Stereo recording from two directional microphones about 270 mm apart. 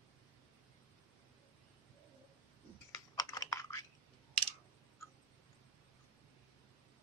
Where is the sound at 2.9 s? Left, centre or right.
Centre.